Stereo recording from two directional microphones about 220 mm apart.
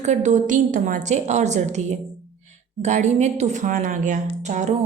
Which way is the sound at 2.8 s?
30° right (ahead or behind).